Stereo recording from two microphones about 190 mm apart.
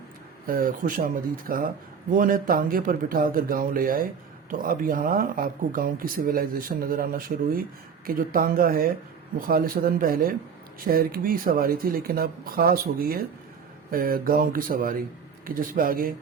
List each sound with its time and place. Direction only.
0.4 s speech: 50° right (ahead or behind)